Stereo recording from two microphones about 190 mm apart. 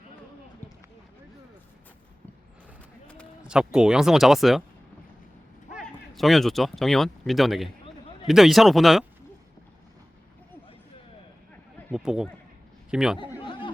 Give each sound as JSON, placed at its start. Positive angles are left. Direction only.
{"t": 3.4, "sound": "speech", "side_deg": -5}
{"t": 5.7, "sound": "speech", "side_deg": 0}
{"t": 11.9, "sound": "speech", "side_deg": -5}
{"t": 13.4, "sound": "a sound", "side_deg": 25}